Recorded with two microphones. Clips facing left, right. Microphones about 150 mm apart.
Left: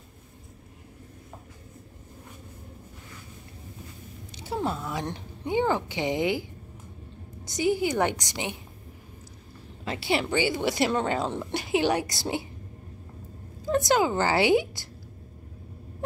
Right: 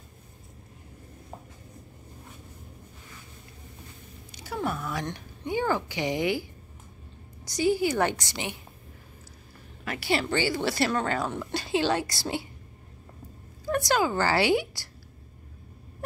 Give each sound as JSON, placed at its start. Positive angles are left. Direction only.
{"t": 4.4, "sound": "a sound", "side_deg": 25}
{"t": 5.0, "sound": "speech", "side_deg": 30}
{"t": 7.4, "sound": "a woman's voice", "side_deg": 20}
{"t": 9.8, "sound": "speech", "side_deg": 20}
{"t": 13.7, "sound": "speech", "side_deg": 20}